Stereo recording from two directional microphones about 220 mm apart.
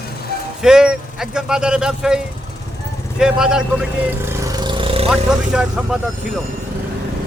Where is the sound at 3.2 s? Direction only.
5° right (ahead or behind); by 5.1 s 25° right (ahead or behind).